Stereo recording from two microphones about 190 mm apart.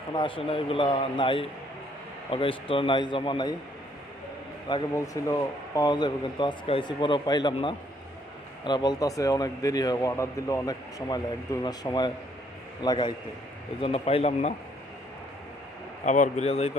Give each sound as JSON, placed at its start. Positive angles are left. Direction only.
{"t": 0.1, "sound": "speech", "side_deg": 25}
{"t": 4.7, "sound": "speech", "side_deg": 15}
{"t": 16.0, "sound": "speech", "side_deg": 40}